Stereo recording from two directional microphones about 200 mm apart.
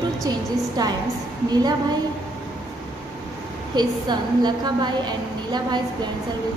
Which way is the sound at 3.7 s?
20° right (ahead or behind).